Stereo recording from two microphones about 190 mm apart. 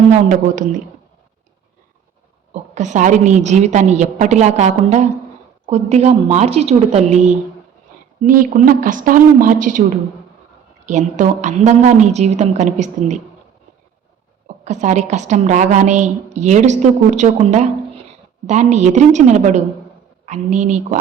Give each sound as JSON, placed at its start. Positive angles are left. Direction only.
{"t": 0.1, "sound": "a woman's voice", "side_deg": -40}
{"t": 2.5, "sound": "a woman's voice", "side_deg": -40}
{"t": 10.8, "sound": "a woman's voice", "side_deg": -40}
{"t": 14.4, "sound": "a woman's voice", "side_deg": -40}